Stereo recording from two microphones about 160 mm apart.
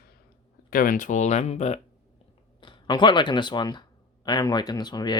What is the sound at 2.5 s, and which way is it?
Speech, 30° left (ahead or behind).